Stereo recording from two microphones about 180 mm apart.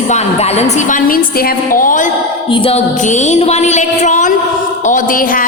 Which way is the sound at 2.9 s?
40° left (ahead or behind).